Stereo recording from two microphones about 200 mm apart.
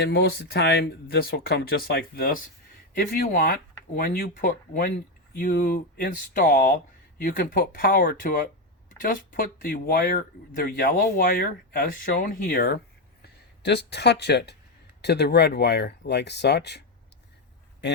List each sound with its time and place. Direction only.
0.0 s speech: 50° left (ahead or behind)